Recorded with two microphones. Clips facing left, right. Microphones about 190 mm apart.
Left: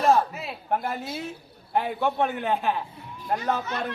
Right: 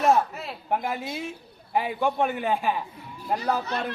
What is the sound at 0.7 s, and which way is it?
Speech, 10° right (ahead or behind).